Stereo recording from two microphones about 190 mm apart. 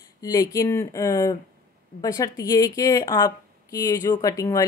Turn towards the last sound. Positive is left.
turn(degrees=15)  # may be behind; listen again after turning